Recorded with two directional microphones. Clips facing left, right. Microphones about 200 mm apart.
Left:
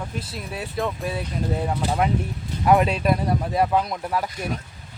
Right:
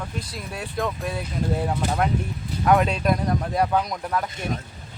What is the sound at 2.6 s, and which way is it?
Speech, 5° left (ahead or behind).